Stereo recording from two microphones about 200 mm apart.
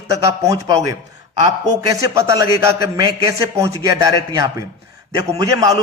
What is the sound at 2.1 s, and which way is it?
A man's voice, 15° right (ahead or behind).